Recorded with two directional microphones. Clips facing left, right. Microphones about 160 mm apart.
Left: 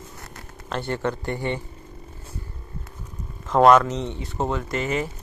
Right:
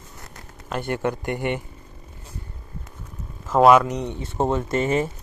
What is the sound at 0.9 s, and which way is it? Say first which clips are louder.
Speech: right 2 dB; 15° right (ahead or behind).